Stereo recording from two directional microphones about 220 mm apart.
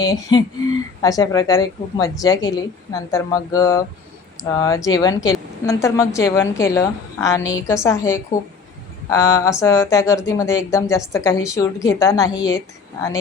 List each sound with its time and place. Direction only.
0.0 s speech: 20° left (ahead or behind)